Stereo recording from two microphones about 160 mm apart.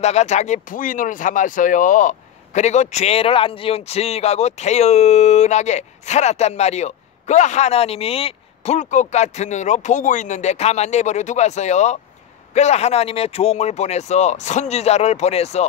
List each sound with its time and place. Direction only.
0.0 s speech: 45° left (ahead or behind)